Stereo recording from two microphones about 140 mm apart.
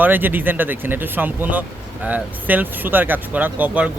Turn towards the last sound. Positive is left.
turn(degrees=-10)  # may be behind; listen again after turning